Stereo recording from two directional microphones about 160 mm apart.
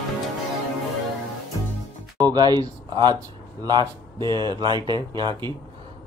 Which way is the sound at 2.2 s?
25° right (ahead or behind).